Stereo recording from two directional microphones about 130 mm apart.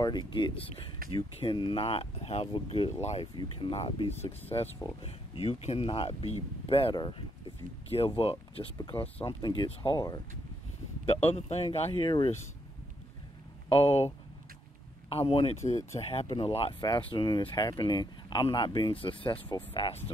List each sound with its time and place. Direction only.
0.0 s speech: 35° left (ahead or behind)
4.5 s speech: 35° left (ahead or behind)
5.0 s speech: 45° left (ahead or behind)
8.7 s speech: 35° left (ahead or behind)
9.9 s speech: 30° left (ahead or behind)
11.1 s speech: 55° left (ahead or behind)
13.7 s speech: 50° left (ahead or behind)
16.3 s speech: 40° left (ahead or behind)
16.8 s speech: 35° left (ahead or behind)